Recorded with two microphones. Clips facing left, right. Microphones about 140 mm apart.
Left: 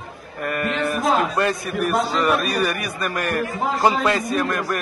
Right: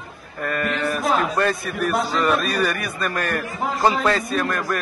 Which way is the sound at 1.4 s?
15° left (ahead or behind).